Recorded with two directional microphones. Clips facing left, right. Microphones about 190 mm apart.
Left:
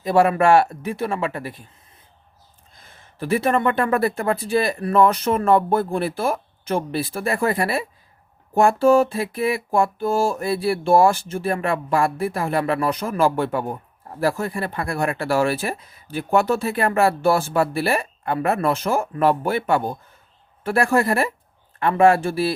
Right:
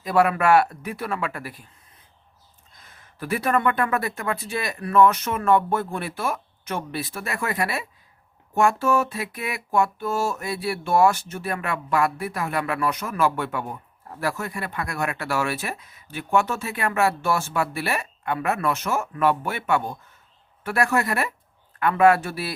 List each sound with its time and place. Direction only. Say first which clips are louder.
0.0 s speech: left 4 dB; 30° left (ahead or behind)
2.8 s speech: left 5 dB; 25° left (ahead or behind)